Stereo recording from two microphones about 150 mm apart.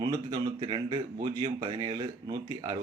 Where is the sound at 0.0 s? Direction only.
25° right (ahead or behind).